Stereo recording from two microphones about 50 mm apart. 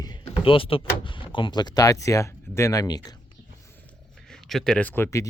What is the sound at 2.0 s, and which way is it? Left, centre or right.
Speech, left.